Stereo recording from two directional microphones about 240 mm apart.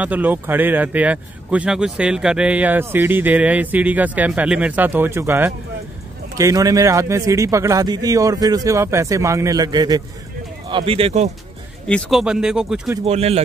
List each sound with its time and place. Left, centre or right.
0.0 s speech: centre; by 11.3 s right
11.9 s speech: centre
13.0 s speech: right